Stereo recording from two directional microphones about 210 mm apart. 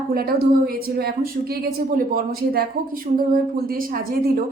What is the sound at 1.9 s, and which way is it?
A woman's voice, 45° right (ahead or behind).